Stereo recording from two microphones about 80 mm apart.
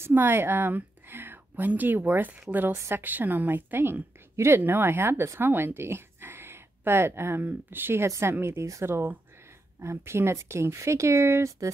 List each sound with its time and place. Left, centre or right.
0.0 s a woman's voice: right